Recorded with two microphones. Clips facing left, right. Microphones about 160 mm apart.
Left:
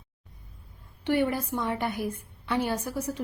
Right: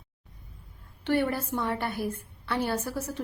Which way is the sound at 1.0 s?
15° left (ahead or behind).